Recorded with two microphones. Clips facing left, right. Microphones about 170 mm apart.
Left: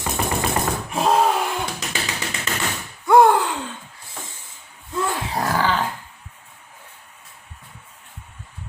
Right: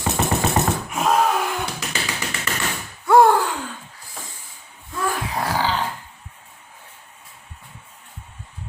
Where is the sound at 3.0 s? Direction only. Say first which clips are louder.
Even; 20° left (ahead or behind).